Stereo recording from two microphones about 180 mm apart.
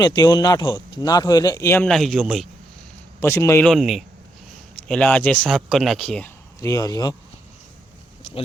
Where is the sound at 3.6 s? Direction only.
Centre (ahead or behind).